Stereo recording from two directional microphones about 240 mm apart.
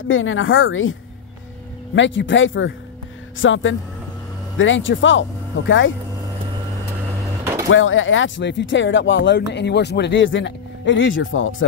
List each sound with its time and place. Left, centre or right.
0.1 s a woman's voice: left
2.0 s speech: left
7.7 s speech: left